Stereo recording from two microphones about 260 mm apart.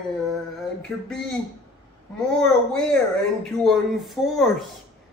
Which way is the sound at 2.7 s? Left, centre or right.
Centre.